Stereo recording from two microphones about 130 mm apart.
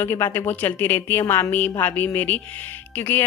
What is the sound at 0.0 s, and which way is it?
A woman's voice, 20° left (ahead or behind).